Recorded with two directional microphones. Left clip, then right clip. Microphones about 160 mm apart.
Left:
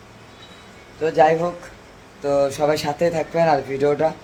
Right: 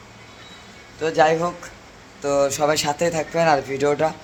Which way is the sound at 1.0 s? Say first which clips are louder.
Left 2 dB; 10° left (ahead or behind).